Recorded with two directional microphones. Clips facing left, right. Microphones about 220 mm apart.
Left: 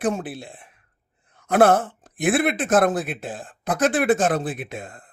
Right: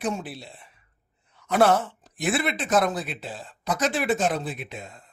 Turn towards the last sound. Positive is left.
turn(degrees=50)  # may be behind; listen again after turning